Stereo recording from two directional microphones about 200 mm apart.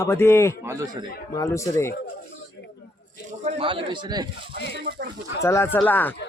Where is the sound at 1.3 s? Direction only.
15° left (ahead or behind).